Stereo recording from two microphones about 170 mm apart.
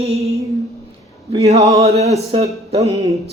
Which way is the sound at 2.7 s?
20° right (ahead or behind).